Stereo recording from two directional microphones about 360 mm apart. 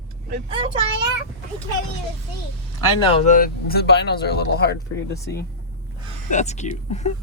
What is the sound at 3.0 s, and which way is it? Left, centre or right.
Speech, centre.